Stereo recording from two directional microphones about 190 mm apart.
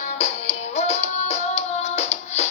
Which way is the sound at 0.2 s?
35° left (ahead or behind).